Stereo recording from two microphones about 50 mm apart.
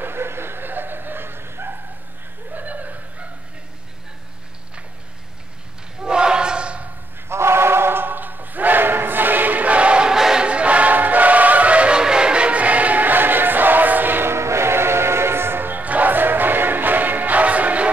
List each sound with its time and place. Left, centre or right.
0.0 s a sound: right
2.5 s chuckle: right
6.0 s a sound: centre
7.2 s choir: right
10.1 s choir: centre
10.4 s music: right
14.3 s music: right